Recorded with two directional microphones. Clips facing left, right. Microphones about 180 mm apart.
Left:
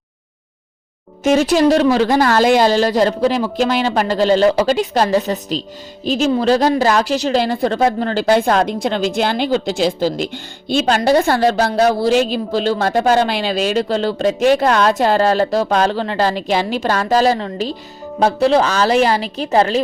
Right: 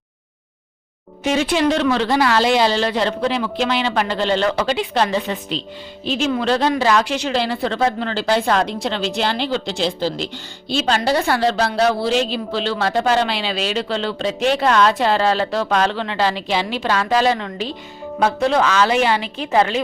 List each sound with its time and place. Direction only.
1.2 s speech: 45° left (ahead or behind)